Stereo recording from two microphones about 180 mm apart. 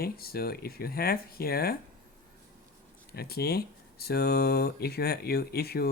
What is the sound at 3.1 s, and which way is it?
Speech, 60° left (ahead or behind).